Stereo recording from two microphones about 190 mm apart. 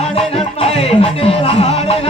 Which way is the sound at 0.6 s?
30° left (ahead or behind).